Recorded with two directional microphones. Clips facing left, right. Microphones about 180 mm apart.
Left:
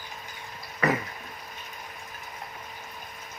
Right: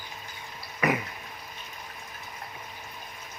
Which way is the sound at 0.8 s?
15° right (ahead or behind).